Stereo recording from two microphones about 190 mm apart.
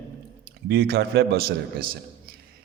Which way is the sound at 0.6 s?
55° right (ahead or behind).